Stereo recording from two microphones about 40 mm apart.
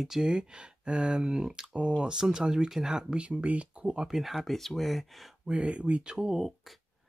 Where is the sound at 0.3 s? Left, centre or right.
Right.